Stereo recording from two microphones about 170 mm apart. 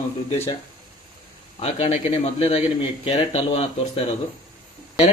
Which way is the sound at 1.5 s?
35° left (ahead or behind).